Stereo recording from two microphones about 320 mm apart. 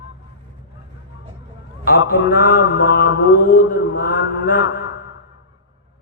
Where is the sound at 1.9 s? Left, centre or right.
Left.